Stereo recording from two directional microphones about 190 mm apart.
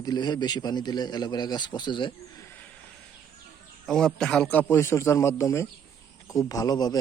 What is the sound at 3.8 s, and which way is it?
A man's voice, 5° left (ahead or behind).